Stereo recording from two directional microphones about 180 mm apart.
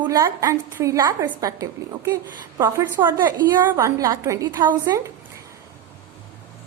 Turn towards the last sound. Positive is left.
turn(degrees=-15)  # may be behind; listen again after turning